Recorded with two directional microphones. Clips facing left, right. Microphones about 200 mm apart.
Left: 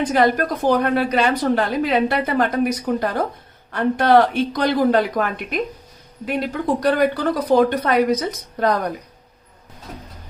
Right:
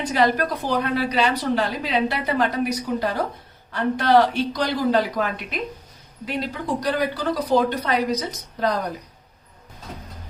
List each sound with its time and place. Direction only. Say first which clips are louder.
0.1 s a woman's voice: left 3 dB; 50° left (ahead or behind)